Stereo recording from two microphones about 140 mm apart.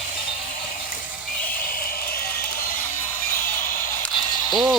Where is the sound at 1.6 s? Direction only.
90° left.